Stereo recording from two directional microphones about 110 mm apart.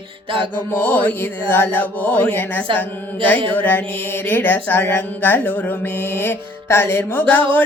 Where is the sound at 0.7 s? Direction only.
20° left (ahead or behind).